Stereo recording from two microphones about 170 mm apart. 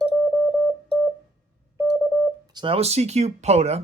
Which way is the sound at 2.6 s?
35° right (ahead or behind).